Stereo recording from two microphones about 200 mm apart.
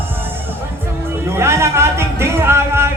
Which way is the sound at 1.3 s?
15° right (ahead or behind).